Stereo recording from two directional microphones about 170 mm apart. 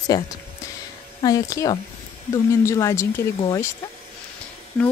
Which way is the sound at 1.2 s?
20° left (ahead or behind).